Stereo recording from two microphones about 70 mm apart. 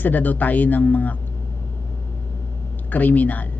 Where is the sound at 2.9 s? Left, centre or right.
Left.